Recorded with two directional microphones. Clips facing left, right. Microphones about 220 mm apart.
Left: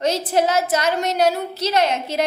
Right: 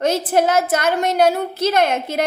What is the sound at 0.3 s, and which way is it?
A woman's voice, 55° right (ahead or behind).